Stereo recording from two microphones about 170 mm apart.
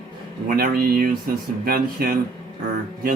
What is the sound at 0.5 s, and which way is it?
Speech, 60° right (ahead or behind).